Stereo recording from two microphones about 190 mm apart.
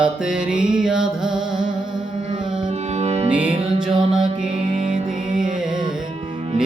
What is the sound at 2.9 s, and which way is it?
Music, 35° right (ahead or behind).